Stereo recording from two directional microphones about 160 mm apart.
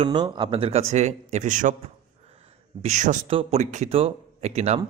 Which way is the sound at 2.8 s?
50° right (ahead or behind).